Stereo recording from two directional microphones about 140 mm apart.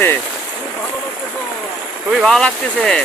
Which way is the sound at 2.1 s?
Centre (ahead or behind).